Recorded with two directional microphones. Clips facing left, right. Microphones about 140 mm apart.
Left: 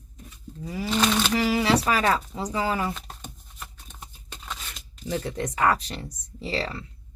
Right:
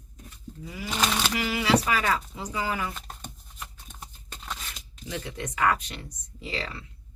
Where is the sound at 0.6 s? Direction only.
35° left (ahead or behind).